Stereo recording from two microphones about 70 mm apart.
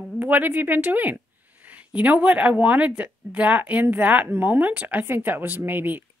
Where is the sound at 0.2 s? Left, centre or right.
Right.